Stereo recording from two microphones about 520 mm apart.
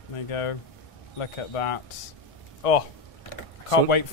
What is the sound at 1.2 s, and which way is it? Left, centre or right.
Speech, left.